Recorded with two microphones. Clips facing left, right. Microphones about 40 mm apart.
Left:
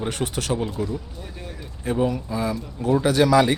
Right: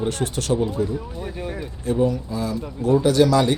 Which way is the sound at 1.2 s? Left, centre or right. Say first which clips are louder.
Right 8 dB; centre.